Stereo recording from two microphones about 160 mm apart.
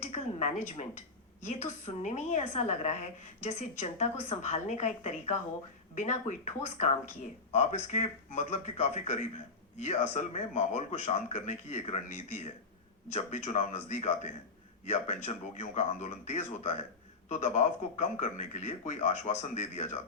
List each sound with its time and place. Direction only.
0.0 s a woman's voice: 45° left (ahead or behind)